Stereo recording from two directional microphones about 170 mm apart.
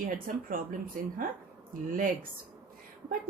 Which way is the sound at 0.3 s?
55° right (ahead or behind).